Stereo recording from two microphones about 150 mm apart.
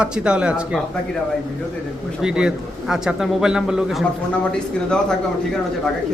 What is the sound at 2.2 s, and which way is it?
A man's voice, 5° right (ahead or behind).